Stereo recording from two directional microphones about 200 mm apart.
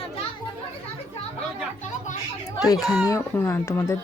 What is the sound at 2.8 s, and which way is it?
Speech, centre (ahead or behind).